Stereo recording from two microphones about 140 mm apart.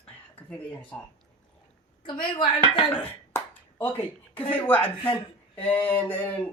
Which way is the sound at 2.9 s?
15° left (ahead or behind).